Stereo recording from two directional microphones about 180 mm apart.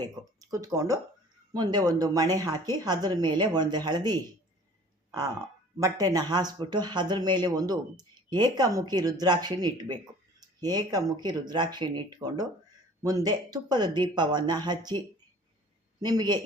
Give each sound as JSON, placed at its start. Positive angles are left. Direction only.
{"t": 0.0, "sound": "speech", "side_deg": -20}
{"t": 5.7, "sound": "speech", "side_deg": -20}